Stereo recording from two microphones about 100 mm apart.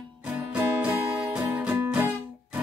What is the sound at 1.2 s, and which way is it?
Music, 15° right (ahead or behind).